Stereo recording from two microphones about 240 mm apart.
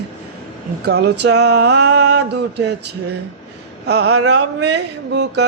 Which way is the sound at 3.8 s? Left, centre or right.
Right.